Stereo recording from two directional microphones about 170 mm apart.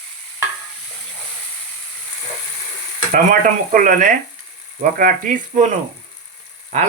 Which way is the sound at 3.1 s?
50° right (ahead or behind).